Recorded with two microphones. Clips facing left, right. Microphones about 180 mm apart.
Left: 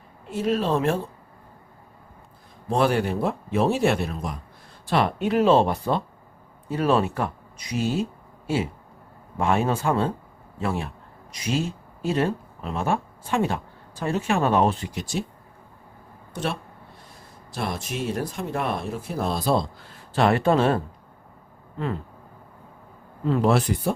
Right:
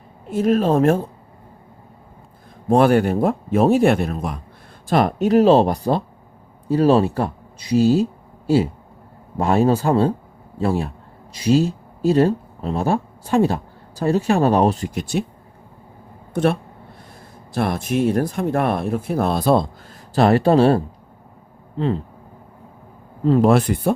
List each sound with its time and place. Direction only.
0.3 s speech: 50° right (ahead or behind)
2.6 s speech: 50° right (ahead or behind)
4.9 s speech: 45° right (ahead or behind)
16.3 s speech: 50° right (ahead or behind)
20.1 s speech: 40° right (ahead or behind)
23.2 s speech: 35° right (ahead or behind)
23.5 s speech: 55° right (ahead or behind)